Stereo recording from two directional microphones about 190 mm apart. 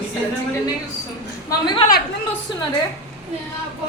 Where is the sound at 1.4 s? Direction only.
25° left (ahead or behind).